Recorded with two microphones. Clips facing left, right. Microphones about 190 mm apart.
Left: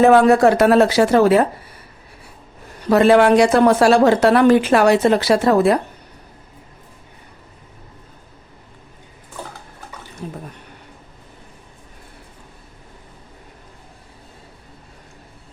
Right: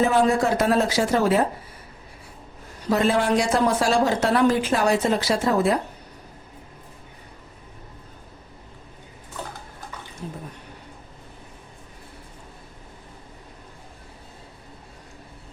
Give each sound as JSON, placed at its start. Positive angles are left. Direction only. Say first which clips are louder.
{"t": 0.0, "sound": "a woman's voice", "louder": "left 8 dB", "side_deg": 70}
{"t": 2.9, "sound": "a woman's voice", "louder": "left 8 dB", "side_deg": 70}
{"t": 10.2, "sound": "drip", "louder": "left 4 dB", "side_deg": 65}